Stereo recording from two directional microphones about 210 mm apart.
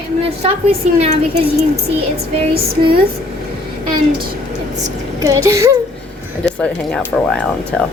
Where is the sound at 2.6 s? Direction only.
25° right (ahead or behind).